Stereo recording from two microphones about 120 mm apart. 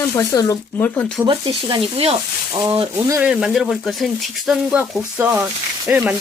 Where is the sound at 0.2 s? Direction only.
30° left (ahead or behind).